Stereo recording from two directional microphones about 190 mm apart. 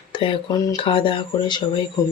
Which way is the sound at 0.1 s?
25° left (ahead or behind).